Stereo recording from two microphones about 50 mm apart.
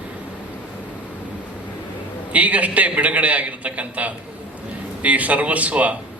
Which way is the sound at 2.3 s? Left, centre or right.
Right.